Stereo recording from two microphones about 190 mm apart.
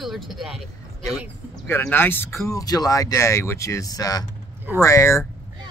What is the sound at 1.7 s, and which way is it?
Speech, 10° left (ahead or behind).